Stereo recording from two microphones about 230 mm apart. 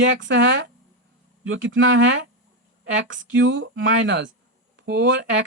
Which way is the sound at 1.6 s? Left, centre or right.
Right.